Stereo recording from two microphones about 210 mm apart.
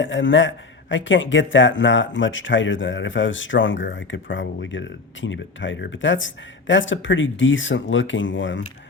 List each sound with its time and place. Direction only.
0.0 s a man's voice: 65° left (ahead or behind)